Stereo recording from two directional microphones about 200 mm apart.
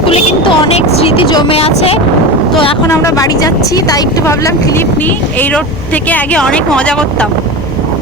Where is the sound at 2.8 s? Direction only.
15° left (ahead or behind).